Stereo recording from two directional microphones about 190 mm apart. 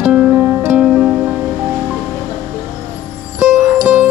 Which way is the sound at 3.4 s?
10° right (ahead or behind).